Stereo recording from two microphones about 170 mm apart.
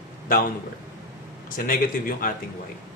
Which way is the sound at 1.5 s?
55° left (ahead or behind).